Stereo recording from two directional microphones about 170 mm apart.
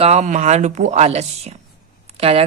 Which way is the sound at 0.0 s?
40° right (ahead or behind).